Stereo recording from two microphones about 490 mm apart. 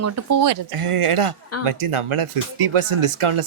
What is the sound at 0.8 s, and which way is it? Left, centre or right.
Speech, right.